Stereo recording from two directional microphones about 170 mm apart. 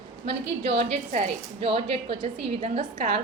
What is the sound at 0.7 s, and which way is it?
A woman's voice, 35° right (ahead or behind).